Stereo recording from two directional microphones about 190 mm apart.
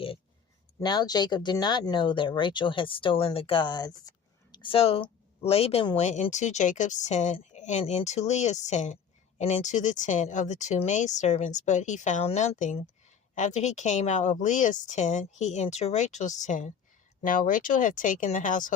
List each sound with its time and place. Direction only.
0.8 s a woman's voice: 20° left (ahead or behind); by 18.7 s 45° left (ahead or behind)